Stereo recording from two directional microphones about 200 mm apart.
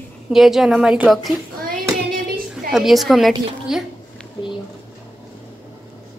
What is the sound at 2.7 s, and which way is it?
A woman's voice, centre (ahead or behind).